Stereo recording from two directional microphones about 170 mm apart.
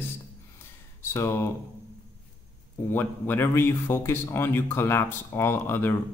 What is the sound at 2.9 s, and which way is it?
Speech, 10° left (ahead or behind).